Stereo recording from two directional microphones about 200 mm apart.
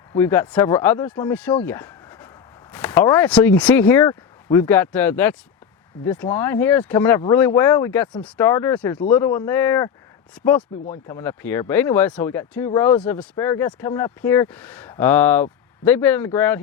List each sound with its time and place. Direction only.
0.2 s speech: 10° left (ahead or behind)
8.9 s speech: 20° left (ahead or behind)